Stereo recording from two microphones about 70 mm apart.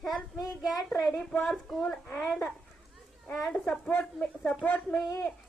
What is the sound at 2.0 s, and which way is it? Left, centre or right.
Speech, left.